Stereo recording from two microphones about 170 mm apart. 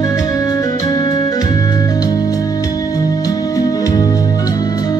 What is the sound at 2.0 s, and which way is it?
Music, 20° left (ahead or behind).